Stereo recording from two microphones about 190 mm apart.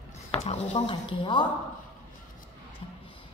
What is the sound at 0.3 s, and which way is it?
A woman's voice, 35° left (ahead or behind).